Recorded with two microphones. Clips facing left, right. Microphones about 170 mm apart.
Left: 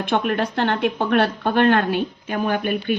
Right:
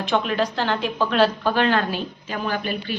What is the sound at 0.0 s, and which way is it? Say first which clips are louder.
A woman's voice: left 1 dB; 55° left (ahead or behind).